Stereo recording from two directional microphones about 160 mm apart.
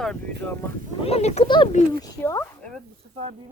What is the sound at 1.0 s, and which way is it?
Speech, 40° left (ahead or behind).